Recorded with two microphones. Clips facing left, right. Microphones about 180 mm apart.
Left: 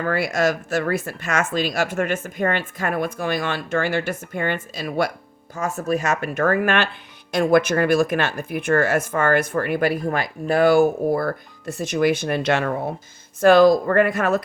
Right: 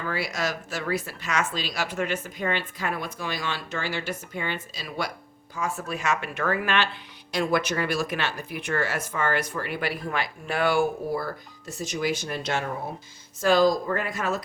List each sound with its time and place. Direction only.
0.0 s speech: 55° left (ahead or behind)